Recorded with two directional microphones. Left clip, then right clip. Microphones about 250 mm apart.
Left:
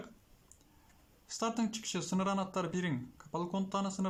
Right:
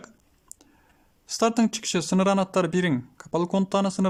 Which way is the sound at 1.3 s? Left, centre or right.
Right.